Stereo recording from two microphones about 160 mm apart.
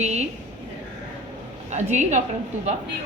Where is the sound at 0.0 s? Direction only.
45° right (ahead or behind).